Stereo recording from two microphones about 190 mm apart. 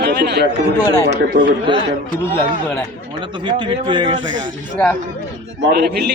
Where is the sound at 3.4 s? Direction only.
25° right (ahead or behind).